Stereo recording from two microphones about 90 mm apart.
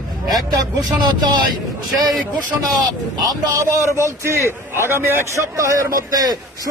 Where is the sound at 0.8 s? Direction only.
50° right (ahead or behind).